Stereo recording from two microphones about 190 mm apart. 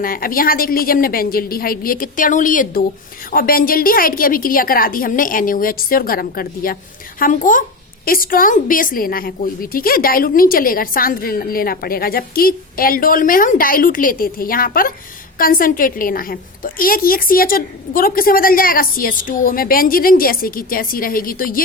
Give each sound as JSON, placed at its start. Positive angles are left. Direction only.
{"t": 0.0, "sound": "a woman's voice", "side_deg": 50}